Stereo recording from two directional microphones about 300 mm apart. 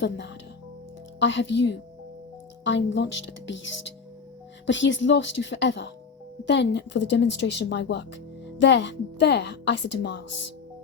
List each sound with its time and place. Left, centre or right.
0.0 s speech: left